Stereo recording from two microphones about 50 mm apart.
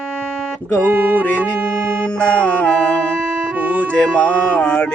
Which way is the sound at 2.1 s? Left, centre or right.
Left.